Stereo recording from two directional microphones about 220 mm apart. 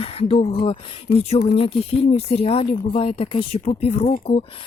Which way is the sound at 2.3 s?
25° left (ahead or behind).